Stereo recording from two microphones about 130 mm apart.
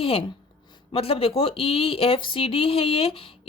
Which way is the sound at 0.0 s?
45° left (ahead or behind).